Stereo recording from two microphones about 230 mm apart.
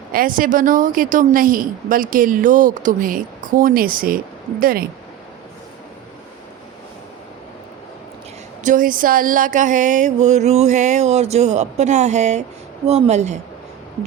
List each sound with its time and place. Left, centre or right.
0.1 s a woman's voice: right
8.6 s a woman's voice: right